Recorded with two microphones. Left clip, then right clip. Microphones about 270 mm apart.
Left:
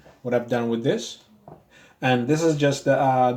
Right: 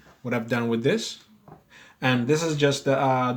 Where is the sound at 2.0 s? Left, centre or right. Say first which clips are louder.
Left 2 dB; right.